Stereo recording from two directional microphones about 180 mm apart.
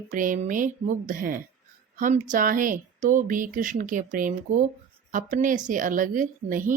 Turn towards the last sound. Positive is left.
turn(degrees=-50)  # may be behind; listen again after turning